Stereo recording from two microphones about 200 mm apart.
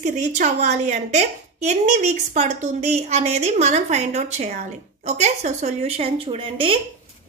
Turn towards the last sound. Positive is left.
turn(degrees=-25)  # may be behind; listen again after turning